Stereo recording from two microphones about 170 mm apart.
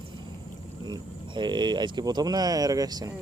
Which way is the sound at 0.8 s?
25° right (ahead or behind).